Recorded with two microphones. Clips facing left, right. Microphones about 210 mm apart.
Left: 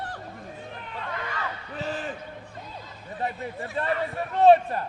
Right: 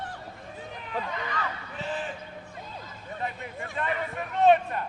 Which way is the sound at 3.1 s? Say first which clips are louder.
Left 4 dB; 35° left (ahead or behind).